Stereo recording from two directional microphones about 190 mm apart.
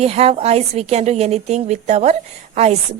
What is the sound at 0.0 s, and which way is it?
A woman's voice, 35° right (ahead or behind).